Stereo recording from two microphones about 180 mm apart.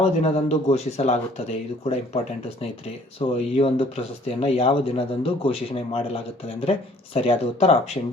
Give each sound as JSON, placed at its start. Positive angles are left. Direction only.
{"t": 0.0, "sound": "speech", "side_deg": 35}
{"t": 3.2, "sound": "speech", "side_deg": 35}